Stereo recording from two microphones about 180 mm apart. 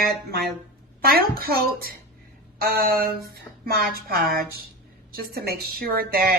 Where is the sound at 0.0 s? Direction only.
60° right (ahead or behind).